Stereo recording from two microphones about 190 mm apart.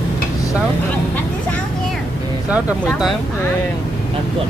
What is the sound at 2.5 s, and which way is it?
Speech, 5° right (ahead or behind).